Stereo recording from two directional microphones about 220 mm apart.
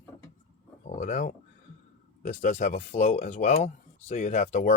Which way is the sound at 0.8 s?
35° left (ahead or behind).